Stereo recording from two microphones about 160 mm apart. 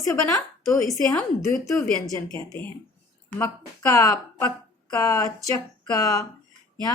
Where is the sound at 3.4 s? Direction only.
20° left (ahead or behind).